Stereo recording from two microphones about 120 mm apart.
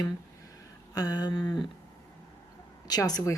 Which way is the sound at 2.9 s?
30° left (ahead or behind).